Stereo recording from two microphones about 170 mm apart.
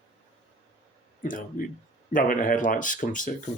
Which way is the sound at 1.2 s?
50° left (ahead or behind).